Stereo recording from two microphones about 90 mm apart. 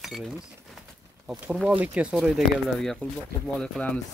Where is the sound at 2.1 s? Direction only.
Centre (ahead or behind).